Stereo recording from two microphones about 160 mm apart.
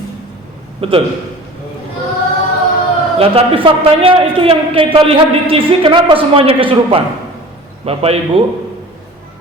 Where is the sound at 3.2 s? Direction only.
35° right (ahead or behind).